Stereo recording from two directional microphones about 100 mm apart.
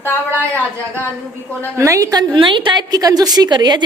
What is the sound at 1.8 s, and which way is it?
Speech, 35° right (ahead or behind).